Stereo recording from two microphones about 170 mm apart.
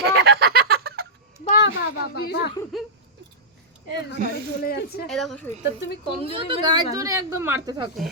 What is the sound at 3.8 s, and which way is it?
Speech, 75° left (ahead or behind).